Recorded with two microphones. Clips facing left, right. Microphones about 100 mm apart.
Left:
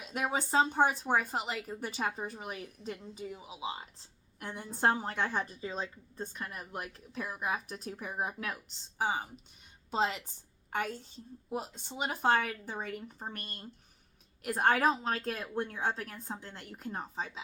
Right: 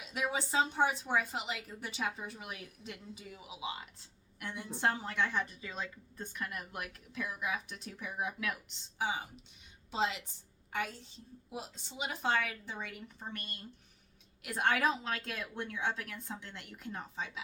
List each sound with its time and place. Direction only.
0.0 s a woman's voice: 45° left (ahead or behind)